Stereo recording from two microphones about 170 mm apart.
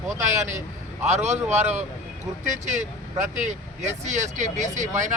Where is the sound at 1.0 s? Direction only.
40° right (ahead or behind).